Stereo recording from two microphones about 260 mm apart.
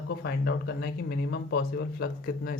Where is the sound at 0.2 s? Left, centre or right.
Left.